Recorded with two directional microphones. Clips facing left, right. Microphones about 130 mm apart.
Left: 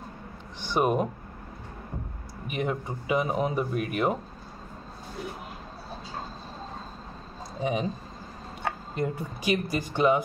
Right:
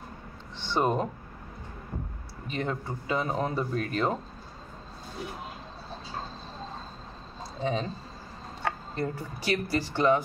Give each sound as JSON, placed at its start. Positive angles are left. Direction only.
{"t": 0.6, "sound": "speech", "side_deg": 15}
{"t": 2.4, "sound": "speech", "side_deg": 15}
{"t": 7.6, "sound": "speech", "side_deg": 15}
{"t": 8.9, "sound": "speech", "side_deg": 15}